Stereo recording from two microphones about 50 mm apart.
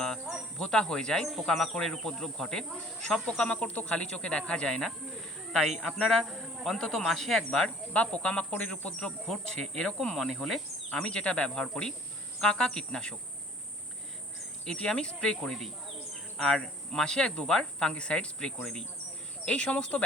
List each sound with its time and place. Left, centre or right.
0.6 s speech: centre
1.3 s insect: centre
1.8 s speech: centre
3.2 s speech: left
5.5 s speech: centre; by 9.0 s left
9.0 s speech: centre
10.2 s insect: centre
11.0 s speech: centre
14.6 s speech: centre